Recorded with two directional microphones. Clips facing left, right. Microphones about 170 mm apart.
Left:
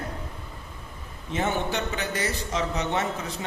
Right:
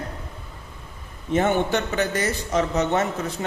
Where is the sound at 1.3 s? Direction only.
50° right (ahead or behind).